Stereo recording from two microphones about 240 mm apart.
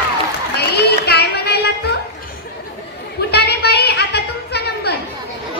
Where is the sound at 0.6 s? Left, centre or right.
Left.